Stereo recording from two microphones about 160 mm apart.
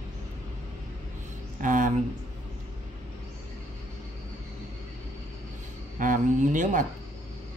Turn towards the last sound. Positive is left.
turn(degrees=-50)  # may be behind; listen again after turning